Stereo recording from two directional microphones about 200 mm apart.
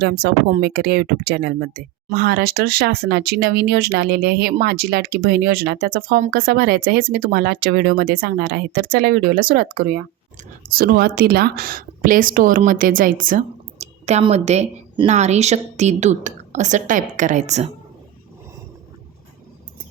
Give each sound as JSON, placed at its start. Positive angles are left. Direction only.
{"t": 0.0, "sound": "speech", "side_deg": -50}